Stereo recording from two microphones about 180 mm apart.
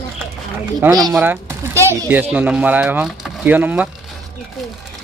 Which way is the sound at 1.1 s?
15° right (ahead or behind).